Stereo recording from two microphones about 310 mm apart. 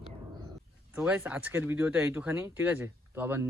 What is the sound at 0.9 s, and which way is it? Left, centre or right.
Speech, centre.